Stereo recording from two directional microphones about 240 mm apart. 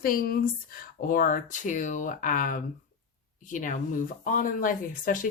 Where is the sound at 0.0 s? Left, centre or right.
Left.